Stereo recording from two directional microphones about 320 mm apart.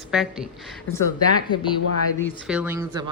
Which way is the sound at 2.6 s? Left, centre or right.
Centre.